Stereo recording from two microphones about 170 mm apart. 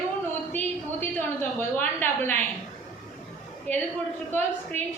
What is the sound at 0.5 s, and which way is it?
A woman's voice, 10° left (ahead or behind).